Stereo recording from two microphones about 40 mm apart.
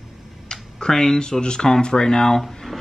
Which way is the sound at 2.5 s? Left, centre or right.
Centre.